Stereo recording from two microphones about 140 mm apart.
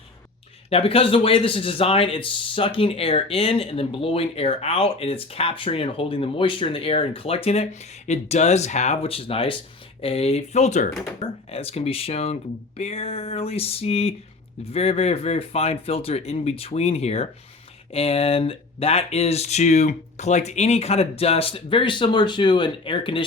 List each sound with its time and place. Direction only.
0.7 s a man's voice: 45° left (ahead or behind)